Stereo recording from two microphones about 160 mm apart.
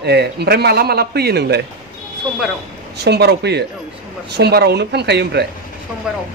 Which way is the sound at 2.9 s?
90° right.